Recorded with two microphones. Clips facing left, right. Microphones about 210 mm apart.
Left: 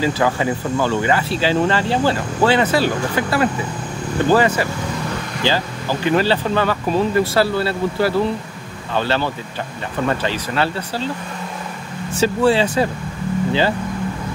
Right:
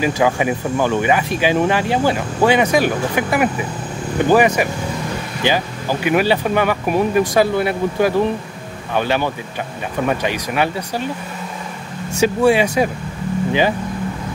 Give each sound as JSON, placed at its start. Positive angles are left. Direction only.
{"t": 0.0, "sound": "speech", "side_deg": -15}
{"t": 12.1, "sound": "speech", "side_deg": -10}